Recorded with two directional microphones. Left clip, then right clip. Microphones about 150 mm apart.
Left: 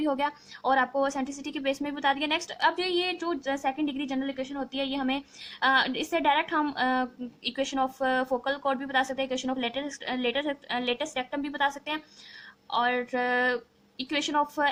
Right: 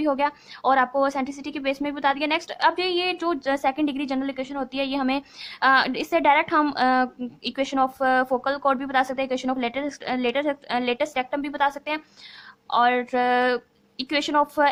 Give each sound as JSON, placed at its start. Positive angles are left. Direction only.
{"t": 0.0, "sound": "a woman's voice", "side_deg": -25}